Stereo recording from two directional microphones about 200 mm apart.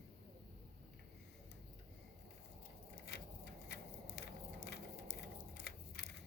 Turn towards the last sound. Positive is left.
turn(degrees=55)  # may be behind; listen again after turning